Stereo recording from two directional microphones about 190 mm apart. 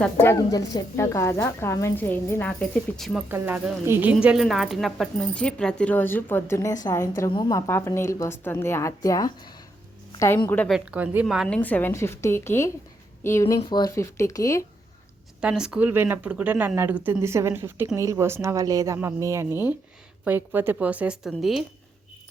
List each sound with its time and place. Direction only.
0.0 s a woman's voice: 10° left (ahead or behind)
3.2 s a woman's voice: 10° right (ahead or behind); by 10.8 s 10° left (ahead or behind)
10.8 s speech: 5° right (ahead or behind)
11.4 s a woman's voice: 5° left (ahead or behind)
13.6 s a woman's voice: 25° left (ahead or behind)
15.4 s speech: 5° right (ahead or behind)